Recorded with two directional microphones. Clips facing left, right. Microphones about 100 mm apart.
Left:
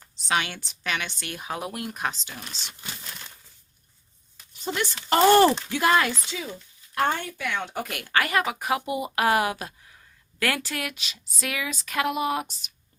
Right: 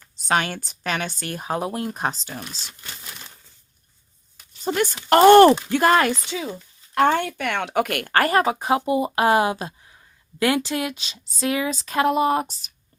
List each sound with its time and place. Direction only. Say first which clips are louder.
0.2 s speech: right 4 dB; 45° right (ahead or behind)
2.5 s speech: right 1 dB; 5° right (ahead or behind)
4.6 s speech: right 6 dB; 45° right (ahead or behind)
5.0 s speech: right 6 dB; 60° right (ahead or behind)
5.7 s speech: right 4 dB; 45° right (ahead or behind)
6.9 s speech: right 7 dB; 65° right (ahead or behind); by 12.7 s 35° right (ahead or behind)